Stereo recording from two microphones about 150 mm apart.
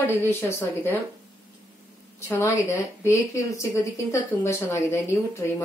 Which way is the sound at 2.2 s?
20° left (ahead or behind).